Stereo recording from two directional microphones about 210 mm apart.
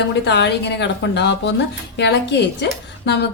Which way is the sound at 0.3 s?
55° left (ahead or behind).